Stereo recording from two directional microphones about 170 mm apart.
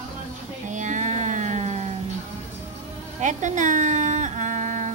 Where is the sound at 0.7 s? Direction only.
45° right (ahead or behind).